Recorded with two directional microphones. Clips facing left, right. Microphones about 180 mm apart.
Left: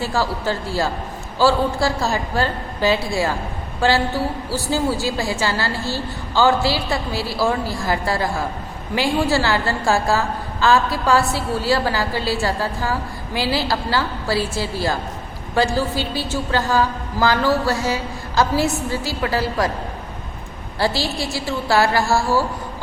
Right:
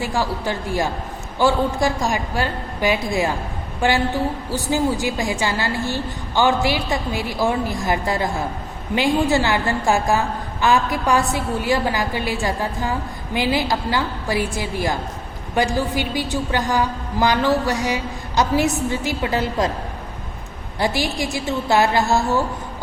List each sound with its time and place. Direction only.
0.0 s a woman's voice: 15° right (ahead or behind)
20.7 s a woman's voice: 15° right (ahead or behind)